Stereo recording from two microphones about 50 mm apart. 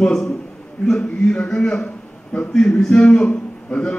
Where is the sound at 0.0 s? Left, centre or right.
Centre.